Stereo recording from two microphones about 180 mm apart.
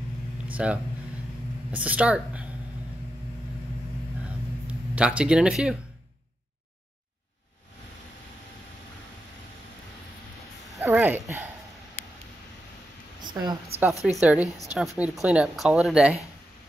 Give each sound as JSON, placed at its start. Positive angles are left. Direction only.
{"t": 0.6, "sound": "a woman's voice", "side_deg": -5}
{"t": 4.6, "sound": "speech", "side_deg": -5}
{"t": 10.8, "sound": "a woman's voice", "side_deg": -10}
{"t": 13.2, "sound": "a woman's voice", "side_deg": -25}
{"t": 14.0, "sound": "a woman's voice", "side_deg": -5}